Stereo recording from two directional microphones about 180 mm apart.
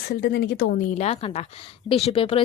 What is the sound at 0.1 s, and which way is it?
A woman's voice, 65° left (ahead or behind).